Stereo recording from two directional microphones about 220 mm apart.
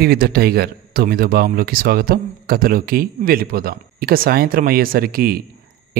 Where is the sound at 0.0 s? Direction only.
45° right (ahead or behind).